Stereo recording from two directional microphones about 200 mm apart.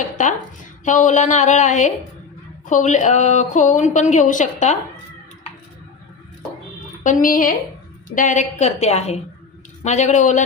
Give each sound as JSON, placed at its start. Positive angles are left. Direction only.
{"t": 0.0, "sound": "a woman's voice", "side_deg": 40}
{"t": 7.0, "sound": "a woman's voice", "side_deg": 40}